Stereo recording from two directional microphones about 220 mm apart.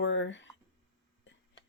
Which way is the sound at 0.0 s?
55° left (ahead or behind).